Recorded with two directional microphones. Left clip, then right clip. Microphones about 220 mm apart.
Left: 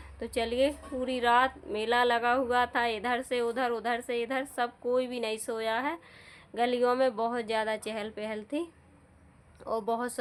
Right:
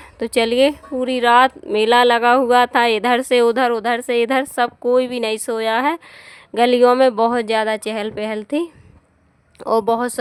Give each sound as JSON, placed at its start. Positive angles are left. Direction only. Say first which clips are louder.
{"t": 0.0, "sound": "speech", "louder": "right 14 dB", "side_deg": -50}